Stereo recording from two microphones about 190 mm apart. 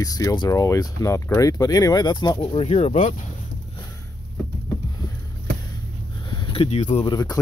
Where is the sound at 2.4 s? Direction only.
35° left (ahead or behind).